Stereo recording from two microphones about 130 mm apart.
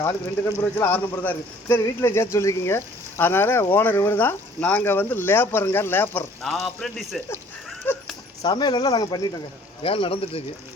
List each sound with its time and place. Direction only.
0.6 s speech: 15° left (ahead or behind)
6.4 s a man's voice: centre (ahead or behind)
7.9 s speech: 15° left (ahead or behind)
8.4 s speech: 35° left (ahead or behind)
9.8 s speech: 45° left (ahead or behind)